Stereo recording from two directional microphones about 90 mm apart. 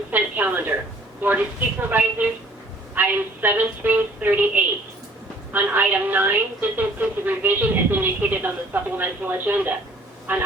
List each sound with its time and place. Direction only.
0.1 s a woman's voice: 20° right (ahead or behind)